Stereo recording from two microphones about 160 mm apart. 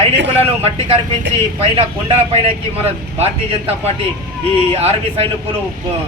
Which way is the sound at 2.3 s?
40° right (ahead or behind).